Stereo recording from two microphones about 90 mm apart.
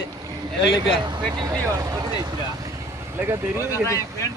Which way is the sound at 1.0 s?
55° right (ahead or behind).